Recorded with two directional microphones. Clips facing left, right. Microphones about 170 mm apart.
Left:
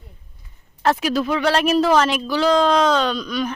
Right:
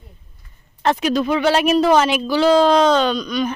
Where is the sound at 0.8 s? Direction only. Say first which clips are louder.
Right 1 dB; 5° left (ahead or behind).